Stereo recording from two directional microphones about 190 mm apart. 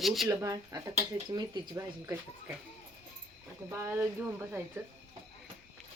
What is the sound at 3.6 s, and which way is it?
Speech, 15° right (ahead or behind).